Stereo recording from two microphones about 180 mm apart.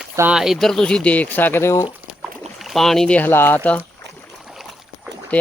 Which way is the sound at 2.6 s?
Centre (ahead or behind).